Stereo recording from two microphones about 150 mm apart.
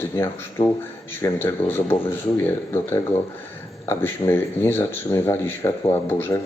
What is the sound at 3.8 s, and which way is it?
Speech, 15° left (ahead or behind).